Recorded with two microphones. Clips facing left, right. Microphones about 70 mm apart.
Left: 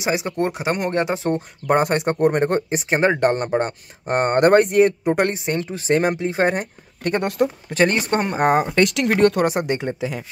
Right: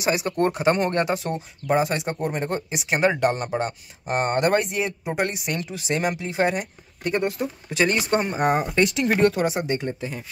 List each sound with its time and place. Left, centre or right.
0.0 s speech: left
1.3 s speech: left
2.7 s speech: left
5.3 s speech: left
7.0 s speech: left
7.7 s speech: left
8.7 s speech: left